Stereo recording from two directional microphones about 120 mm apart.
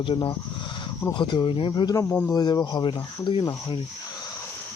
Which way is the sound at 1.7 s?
30° left (ahead or behind).